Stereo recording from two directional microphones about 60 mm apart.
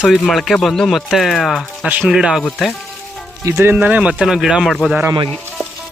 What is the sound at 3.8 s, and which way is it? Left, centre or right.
Speech, right.